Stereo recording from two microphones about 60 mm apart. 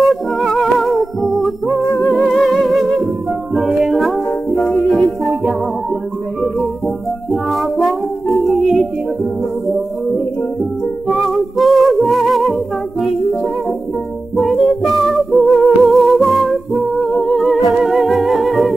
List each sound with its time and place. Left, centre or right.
0.0 s music: centre
2.0 s music: left
2.3 s music: centre
7.2 s music: centre